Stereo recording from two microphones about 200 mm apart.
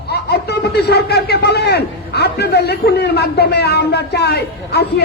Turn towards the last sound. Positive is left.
turn(degrees=55)  # may be behind; listen again after turning